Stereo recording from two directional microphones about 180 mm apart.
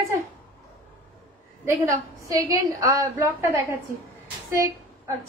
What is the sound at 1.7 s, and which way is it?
A woman's voice, 20° right (ahead or behind).